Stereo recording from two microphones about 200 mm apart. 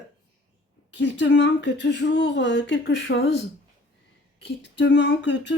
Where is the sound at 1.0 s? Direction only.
65° left (ahead or behind).